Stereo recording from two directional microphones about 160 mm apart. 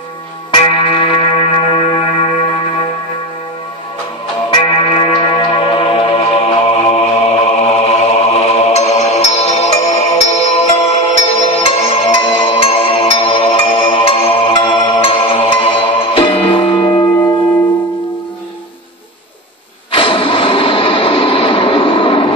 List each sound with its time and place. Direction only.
0.6 s music: 30° left (ahead or behind)
4.6 s music: 30° left (ahead or behind)
19.9 s train: 35° left (ahead or behind)